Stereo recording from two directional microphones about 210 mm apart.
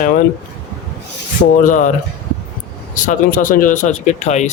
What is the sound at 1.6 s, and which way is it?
Speech, 40° left (ahead or behind).